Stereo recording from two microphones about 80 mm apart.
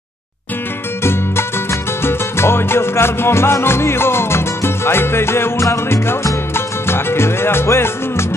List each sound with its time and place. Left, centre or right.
1.0 s music: left